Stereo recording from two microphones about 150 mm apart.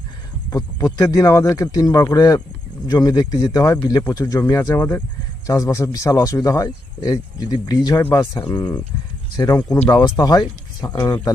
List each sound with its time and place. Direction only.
0.5 s speech: 25° left (ahead or behind)